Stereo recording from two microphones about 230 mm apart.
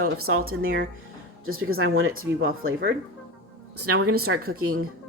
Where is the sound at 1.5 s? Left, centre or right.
Right.